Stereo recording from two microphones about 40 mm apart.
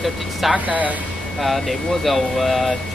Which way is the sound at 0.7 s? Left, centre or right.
Right.